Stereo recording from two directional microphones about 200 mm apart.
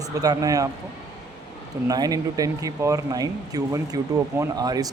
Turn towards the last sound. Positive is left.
turn(degrees=-20)  # may be behind; listen again after turning